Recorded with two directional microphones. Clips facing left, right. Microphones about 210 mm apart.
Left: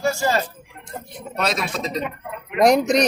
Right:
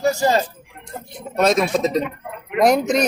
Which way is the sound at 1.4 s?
50° right (ahead or behind).